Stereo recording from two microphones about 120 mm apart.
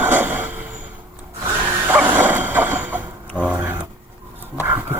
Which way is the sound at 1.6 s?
15° right (ahead or behind).